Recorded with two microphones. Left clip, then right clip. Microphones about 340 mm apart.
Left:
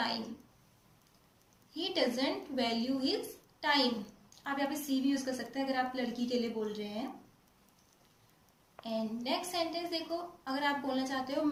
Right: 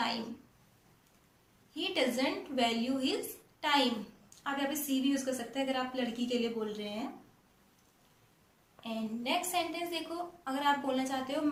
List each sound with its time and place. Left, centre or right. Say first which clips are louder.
1.7 s a woman's voice: right 1 dB; centre
8.8 s a woman's voice: left 1 dB; centre